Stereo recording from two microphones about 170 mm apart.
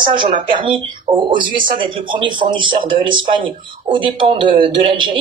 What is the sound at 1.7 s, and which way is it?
Speech, 30° right (ahead or behind).